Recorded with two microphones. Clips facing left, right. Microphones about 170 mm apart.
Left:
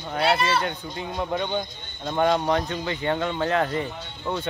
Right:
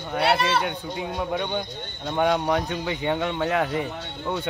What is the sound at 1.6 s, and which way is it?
Speech, 65° right (ahead or behind).